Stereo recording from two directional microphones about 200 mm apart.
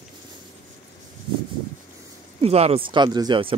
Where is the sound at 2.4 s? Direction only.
30° right (ahead or behind).